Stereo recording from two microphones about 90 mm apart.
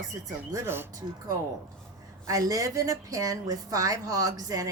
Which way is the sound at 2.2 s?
40° right (ahead or behind).